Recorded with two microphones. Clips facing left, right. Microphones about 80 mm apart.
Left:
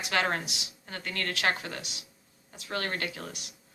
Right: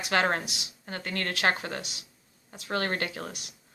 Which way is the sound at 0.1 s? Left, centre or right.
Right.